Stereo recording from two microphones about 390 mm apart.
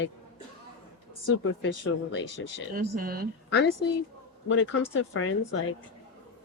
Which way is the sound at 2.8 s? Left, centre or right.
Right.